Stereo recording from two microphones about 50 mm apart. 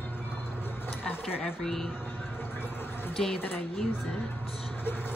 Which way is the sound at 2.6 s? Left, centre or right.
Left.